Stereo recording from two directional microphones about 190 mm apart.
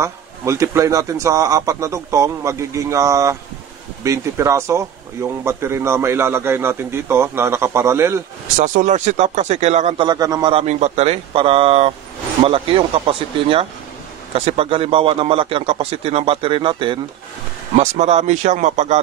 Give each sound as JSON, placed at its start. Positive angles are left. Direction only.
{"t": 0.0, "sound": "speech", "side_deg": -15}
{"t": 8.5, "sound": "speech", "side_deg": -40}
{"t": 10.0, "sound": "a man's voice", "side_deg": -20}
{"t": 10.5, "sound": "a man's voice", "side_deg": -35}
{"t": 17.7, "sound": "speech", "side_deg": -35}